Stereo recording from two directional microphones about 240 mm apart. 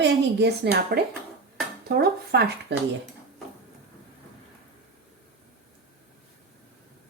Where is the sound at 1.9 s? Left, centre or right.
Right.